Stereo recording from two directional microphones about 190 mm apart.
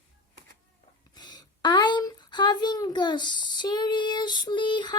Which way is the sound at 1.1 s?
20° left (ahead or behind).